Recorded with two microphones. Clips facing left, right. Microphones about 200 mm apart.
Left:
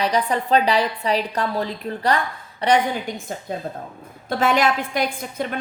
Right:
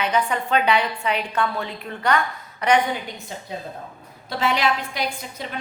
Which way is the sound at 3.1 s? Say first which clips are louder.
Left 5 dB; 45° left (ahead or behind).